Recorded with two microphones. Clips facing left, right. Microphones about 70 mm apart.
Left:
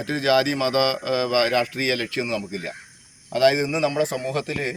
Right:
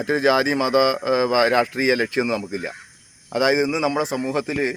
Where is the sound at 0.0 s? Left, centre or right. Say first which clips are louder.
Right 2 dB; right.